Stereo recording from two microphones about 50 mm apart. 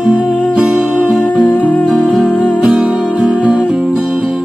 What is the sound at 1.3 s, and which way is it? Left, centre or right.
Music, left.